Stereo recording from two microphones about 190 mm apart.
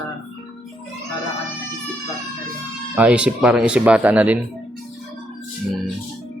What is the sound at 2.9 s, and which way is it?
Speech, 5° right (ahead or behind).